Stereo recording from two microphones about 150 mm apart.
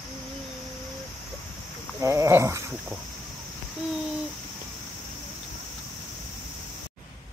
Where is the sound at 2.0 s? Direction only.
20° right (ahead or behind).